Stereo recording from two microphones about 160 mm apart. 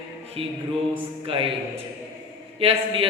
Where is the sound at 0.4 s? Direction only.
35° right (ahead or behind).